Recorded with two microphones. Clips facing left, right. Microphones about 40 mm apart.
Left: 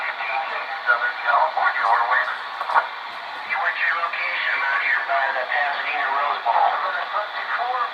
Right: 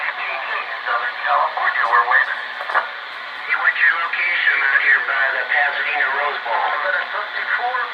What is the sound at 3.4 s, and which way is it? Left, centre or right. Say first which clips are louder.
Radio: right 6 dB; right.